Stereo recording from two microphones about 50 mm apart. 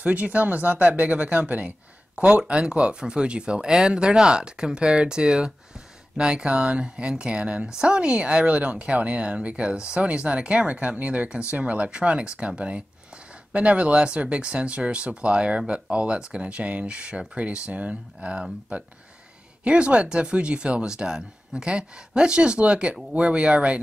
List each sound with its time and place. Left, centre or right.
0.0 s speech: right